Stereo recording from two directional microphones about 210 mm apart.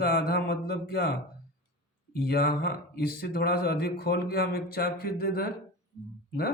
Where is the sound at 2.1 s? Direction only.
45° left (ahead or behind).